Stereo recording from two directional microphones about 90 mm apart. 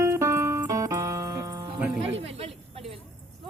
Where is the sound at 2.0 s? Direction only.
90° right.